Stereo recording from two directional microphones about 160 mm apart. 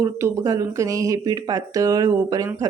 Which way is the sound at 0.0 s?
20° right (ahead or behind).